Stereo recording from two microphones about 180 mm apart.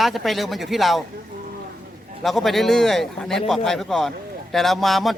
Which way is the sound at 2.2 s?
Centre (ahead or behind).